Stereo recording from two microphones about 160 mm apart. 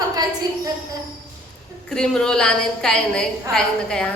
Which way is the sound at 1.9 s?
5° left (ahead or behind).